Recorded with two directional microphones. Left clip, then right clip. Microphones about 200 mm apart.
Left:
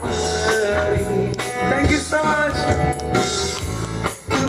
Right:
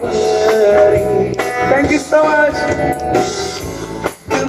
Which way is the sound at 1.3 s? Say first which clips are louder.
Right 7 dB; 30° right (ahead or behind).